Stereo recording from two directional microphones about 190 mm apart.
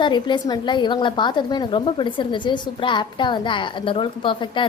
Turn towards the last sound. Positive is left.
turn(degrees=25)  # may be behind; listen again after turning